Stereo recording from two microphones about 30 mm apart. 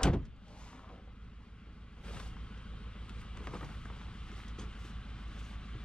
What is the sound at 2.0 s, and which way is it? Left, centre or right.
Vehicle, left.